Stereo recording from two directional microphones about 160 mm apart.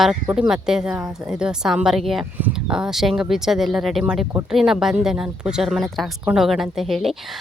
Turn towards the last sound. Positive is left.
turn(degrees=0)  # may be behind; listen again after turning